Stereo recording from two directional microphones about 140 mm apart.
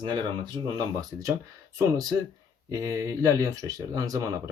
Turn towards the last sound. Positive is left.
turn(degrees=-25)  # may be behind; listen again after turning